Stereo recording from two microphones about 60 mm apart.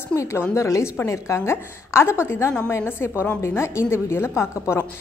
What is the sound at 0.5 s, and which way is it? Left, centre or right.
A woman's voice, left.